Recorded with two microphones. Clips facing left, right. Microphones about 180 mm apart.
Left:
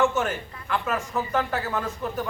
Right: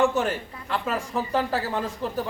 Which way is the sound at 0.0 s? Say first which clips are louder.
Right 1 dB; 35° right (ahead or behind).